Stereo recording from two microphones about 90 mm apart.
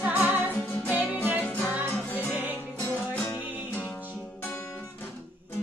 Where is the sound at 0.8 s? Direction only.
20° right (ahead or behind).